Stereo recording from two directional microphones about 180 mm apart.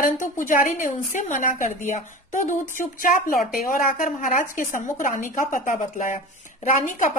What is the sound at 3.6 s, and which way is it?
A woman's voice, 50° left (ahead or behind).